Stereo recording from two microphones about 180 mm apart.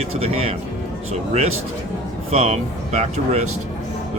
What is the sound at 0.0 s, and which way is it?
Speech, 35° right (ahead or behind).